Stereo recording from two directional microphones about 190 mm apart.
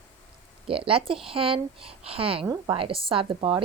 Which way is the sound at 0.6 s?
30° right (ahead or behind).